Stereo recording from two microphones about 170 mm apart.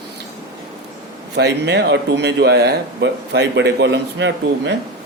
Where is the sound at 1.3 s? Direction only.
80° right.